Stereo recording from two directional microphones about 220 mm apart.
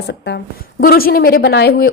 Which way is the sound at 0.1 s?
50° left (ahead or behind).